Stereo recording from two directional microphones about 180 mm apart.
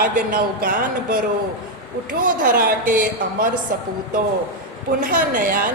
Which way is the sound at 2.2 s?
55° right (ahead or behind).